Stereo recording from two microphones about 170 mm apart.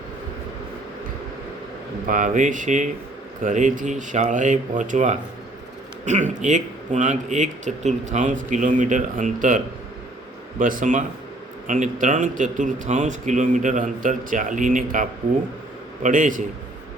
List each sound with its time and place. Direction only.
2.0 s speech: 50° right (ahead or behind)
16.0 s speech: 50° right (ahead or behind)